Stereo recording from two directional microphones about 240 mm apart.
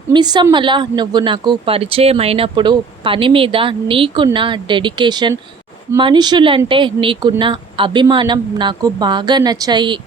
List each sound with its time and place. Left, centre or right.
0.1 s a woman's voice: centre